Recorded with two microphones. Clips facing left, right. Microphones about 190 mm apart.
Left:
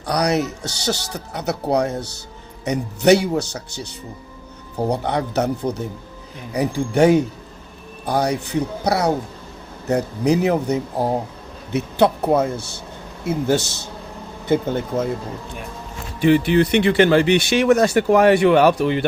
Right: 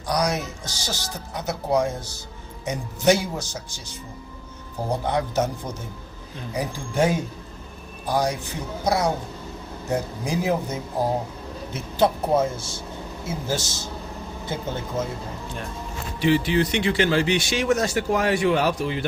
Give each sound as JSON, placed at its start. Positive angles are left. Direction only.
{"t": 0.0, "sound": "speech", "side_deg": 65}
{"t": 16.2, "sound": "speech", "side_deg": 55}